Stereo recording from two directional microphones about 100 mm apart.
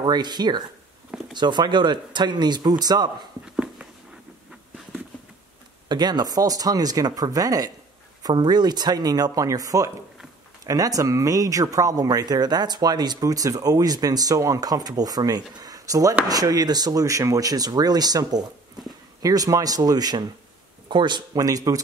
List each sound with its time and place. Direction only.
0.0 s speech: 45° right (ahead or behind)
3.4 s a sound: 10° right (ahead or behind)
5.9 s a man's voice: 45° right (ahead or behind)